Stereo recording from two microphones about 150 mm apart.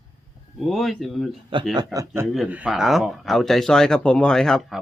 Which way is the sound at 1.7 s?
20° right (ahead or behind).